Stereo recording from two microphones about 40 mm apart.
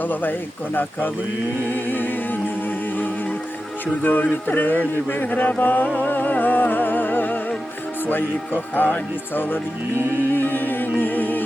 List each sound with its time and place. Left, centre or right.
0.0 s speech: left
1.7 s music: left
8.7 s speech: left
10.3 s music: left